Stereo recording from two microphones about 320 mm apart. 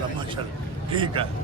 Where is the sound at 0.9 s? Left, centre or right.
Centre.